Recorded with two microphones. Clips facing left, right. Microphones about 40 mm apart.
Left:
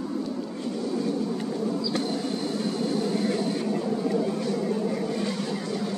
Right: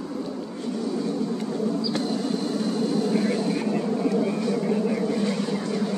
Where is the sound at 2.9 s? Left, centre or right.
Right.